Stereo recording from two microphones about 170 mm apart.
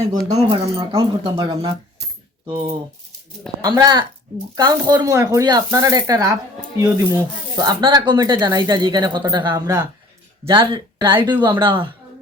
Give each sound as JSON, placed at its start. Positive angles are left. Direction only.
{"t": 0.3, "sound": "speech", "side_deg": -20}
{"t": 3.6, "sound": "speech", "side_deg": -25}